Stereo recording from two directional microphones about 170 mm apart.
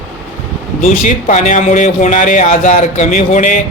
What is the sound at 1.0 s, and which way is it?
Speech, 45° left (ahead or behind).